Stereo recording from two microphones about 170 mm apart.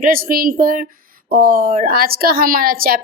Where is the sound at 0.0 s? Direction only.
60° right (ahead or behind).